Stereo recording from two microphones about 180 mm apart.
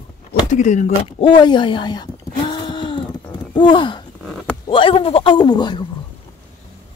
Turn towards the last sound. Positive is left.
turn(degrees=25)  # may be behind; listen again after turning